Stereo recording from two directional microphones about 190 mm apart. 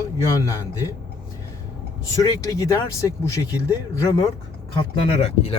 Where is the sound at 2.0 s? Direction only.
20° left (ahead or behind).